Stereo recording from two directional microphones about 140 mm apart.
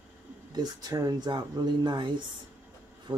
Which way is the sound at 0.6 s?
25° right (ahead or behind).